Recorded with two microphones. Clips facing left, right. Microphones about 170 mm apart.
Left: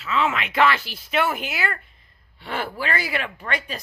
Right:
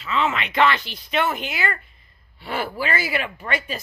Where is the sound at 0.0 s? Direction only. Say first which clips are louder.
Even; 5° left (ahead or behind).